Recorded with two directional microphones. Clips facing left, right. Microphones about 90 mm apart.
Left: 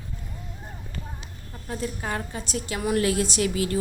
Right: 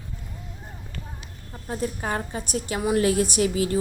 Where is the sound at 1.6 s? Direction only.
30° right (ahead or behind).